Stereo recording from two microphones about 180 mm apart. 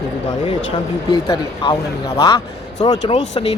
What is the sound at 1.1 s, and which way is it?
Speech, 25° left (ahead or behind).